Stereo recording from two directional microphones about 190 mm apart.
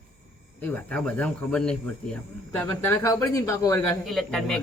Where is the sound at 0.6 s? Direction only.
10° left (ahead or behind).